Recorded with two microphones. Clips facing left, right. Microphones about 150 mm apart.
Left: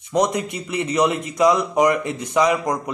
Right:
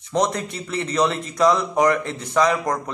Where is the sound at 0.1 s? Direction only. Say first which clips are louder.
Left 2 dB; 15° left (ahead or behind).